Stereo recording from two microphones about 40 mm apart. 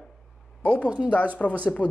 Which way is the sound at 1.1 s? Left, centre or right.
Left.